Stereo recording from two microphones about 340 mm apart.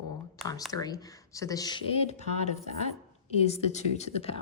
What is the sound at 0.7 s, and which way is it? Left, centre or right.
A woman's voice, centre.